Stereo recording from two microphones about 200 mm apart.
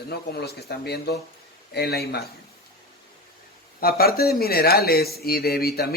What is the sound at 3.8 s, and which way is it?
A man's voice, 50° left (ahead or behind).